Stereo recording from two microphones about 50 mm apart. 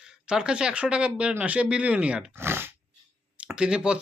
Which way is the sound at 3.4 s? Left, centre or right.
Centre.